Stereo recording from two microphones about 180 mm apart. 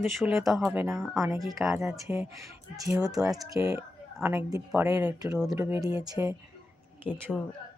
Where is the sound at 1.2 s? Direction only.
20° right (ahead or behind).